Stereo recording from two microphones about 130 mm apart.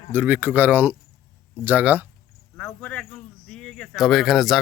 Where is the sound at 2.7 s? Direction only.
10° left (ahead or behind).